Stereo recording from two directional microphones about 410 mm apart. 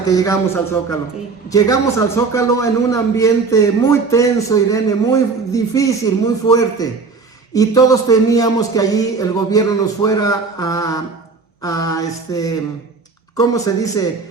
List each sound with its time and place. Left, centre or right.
0.1 s a man's voice: centre